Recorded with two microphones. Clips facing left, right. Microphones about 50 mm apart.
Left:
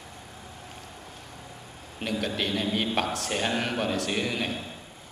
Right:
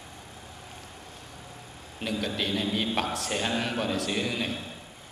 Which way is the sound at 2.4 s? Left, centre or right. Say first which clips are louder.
Even; centre.